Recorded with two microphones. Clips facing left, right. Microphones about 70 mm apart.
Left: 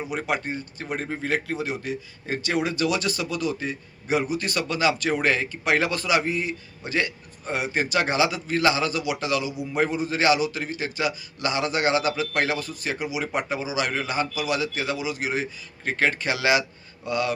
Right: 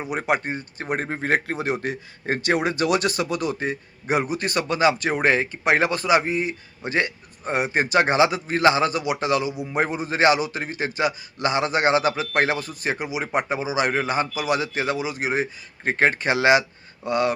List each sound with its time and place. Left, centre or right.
0.2 s a man's voice: right